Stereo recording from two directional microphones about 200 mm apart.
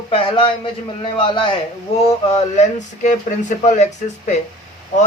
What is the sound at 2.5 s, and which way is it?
Speech, 40° left (ahead or behind).